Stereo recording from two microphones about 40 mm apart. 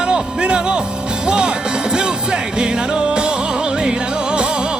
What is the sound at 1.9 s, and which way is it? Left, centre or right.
Music, centre.